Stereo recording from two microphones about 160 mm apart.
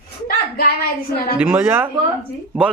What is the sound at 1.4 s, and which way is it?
Speech, 10° right (ahead or behind).